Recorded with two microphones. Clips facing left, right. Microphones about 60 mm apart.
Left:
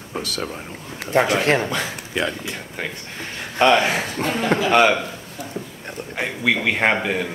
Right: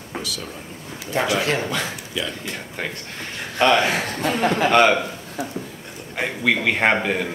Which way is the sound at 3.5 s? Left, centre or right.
Centre.